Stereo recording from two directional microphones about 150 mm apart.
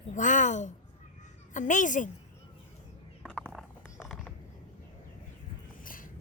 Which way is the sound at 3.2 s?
5° left (ahead or behind).